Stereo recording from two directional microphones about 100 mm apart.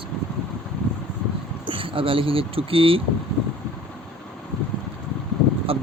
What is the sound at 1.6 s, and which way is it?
Speech, 60° right (ahead or behind).